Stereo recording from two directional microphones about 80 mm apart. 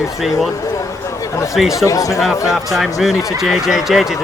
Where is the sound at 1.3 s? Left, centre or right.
Left.